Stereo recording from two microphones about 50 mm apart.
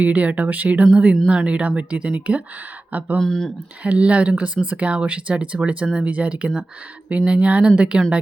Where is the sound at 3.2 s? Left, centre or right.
Centre.